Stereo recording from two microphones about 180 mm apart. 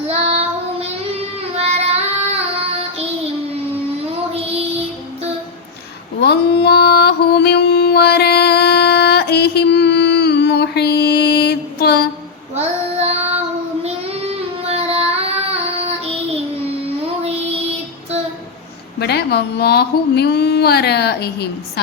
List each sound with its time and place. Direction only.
0.1 s child singing: 35° right (ahead or behind)
4.4 s child singing: 35° right (ahead or behind)
6.2 s mantra: 65° left (ahead or behind)
12.5 s child singing: 35° right (ahead or behind)
18.9 s speech: 65° left (ahead or behind)